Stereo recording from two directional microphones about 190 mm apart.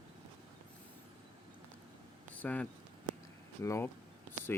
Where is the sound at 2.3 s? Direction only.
5° left (ahead or behind).